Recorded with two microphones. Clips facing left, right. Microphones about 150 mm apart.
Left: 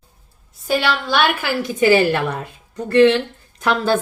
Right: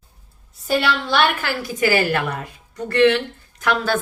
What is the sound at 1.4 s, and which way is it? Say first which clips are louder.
A woman's voice: left 4 dB; 25° left (ahead or behind).